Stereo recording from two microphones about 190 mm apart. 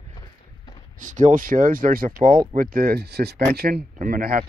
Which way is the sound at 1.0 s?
40° right (ahead or behind).